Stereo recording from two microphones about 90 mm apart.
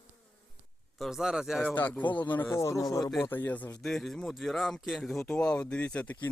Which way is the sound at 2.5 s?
35° left (ahead or behind).